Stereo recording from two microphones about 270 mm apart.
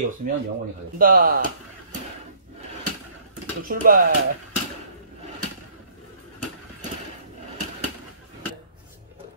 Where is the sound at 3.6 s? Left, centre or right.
Right.